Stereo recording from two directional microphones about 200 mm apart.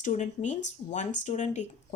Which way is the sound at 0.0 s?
35° left (ahead or behind).